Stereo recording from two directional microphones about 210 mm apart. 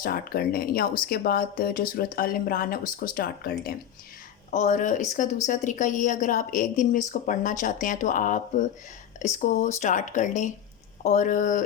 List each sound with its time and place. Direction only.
0.0 s speech: 45° left (ahead or behind)
4.5 s a woman's voice: 35° left (ahead or behind)